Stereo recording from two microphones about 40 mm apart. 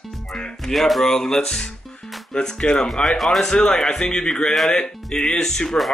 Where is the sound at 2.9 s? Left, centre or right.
Centre.